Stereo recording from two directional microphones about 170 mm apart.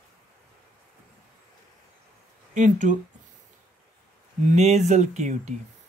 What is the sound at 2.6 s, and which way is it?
Speech, 45° right (ahead or behind).